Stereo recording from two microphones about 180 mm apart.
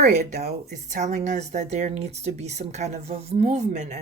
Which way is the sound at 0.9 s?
40° right (ahead or behind).